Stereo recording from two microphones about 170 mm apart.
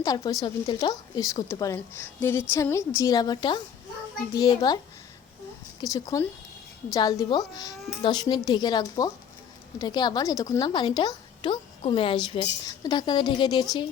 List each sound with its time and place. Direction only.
0.0 s a woman's voice: 20° left (ahead or behind)
5.8 s a woman's voice: 20° left (ahead or behind)